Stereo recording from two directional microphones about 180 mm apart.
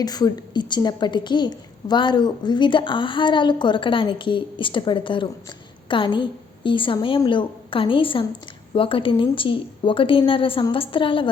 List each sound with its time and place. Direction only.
0.0 s a woman's voice: 20° left (ahead or behind)